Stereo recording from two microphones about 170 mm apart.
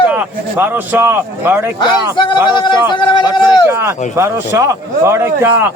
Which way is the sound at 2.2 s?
25° left (ahead or behind).